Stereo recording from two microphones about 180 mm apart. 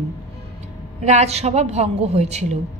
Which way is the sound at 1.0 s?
40° right (ahead or behind).